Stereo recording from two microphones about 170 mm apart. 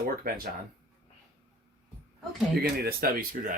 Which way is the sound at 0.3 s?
60° right (ahead or behind).